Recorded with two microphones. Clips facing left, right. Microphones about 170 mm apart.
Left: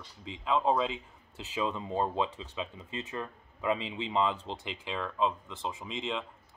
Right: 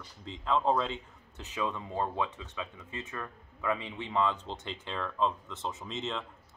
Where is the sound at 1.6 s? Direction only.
20° left (ahead or behind).